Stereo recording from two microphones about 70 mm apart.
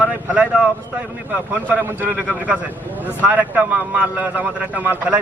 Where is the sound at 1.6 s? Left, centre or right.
Right.